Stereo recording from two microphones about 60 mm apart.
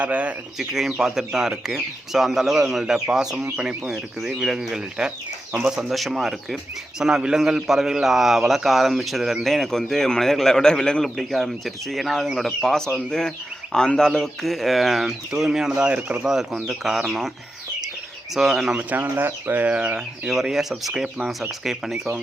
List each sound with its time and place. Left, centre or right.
0.0 s speech: right
0.6 s speech: centre
5.9 s a man's voice: centre
11.2 s a man's voice: centre
14.1 s speech: centre; by 16.2 s right
16.2 s a man's voice: centre
18.3 s speech: centre
18.8 s speech: right
19.6 s speech: right
20.3 s a man's voice: centre